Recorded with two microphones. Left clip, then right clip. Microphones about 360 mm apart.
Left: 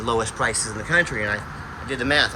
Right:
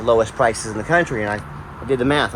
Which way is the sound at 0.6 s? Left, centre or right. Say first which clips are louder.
Right 3 dB; centre.